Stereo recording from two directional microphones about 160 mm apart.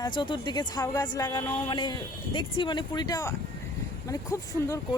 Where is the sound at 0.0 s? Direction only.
30° left (ahead or behind).